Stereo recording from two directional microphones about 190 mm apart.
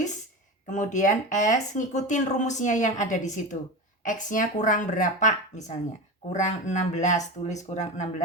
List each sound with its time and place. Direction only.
0.7 s speech: 40° left (ahead or behind)